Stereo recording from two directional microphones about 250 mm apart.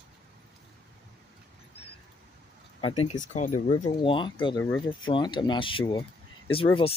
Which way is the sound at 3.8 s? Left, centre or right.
Centre.